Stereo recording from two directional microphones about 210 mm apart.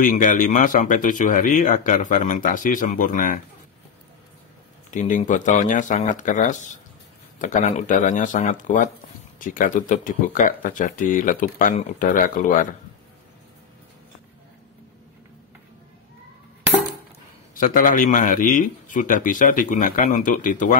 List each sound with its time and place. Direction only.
0.0 s speech: 40° left (ahead or behind)
4.9 s speech: 40° left (ahead or behind)
17.6 s speech: 40° left (ahead or behind)